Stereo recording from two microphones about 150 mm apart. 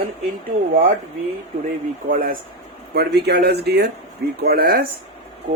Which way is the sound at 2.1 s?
70° right (ahead or behind).